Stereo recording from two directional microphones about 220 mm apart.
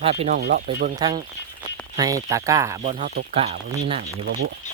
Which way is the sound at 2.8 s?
30° right (ahead or behind).